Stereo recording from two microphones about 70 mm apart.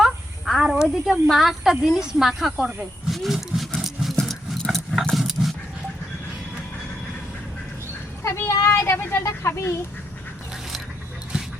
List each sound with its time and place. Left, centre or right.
0.0 s a sound: centre
0.7 s snake: centre
1.3 s speech: centre
3.8 s a sound: centre
4.2 s dog: centre
8.2 s speech: left